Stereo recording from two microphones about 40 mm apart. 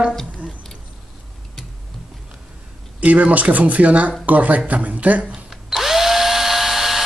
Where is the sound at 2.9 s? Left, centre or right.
Right.